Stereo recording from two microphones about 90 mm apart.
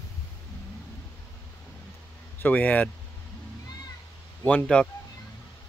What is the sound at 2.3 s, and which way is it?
Speech, 20° left (ahead or behind).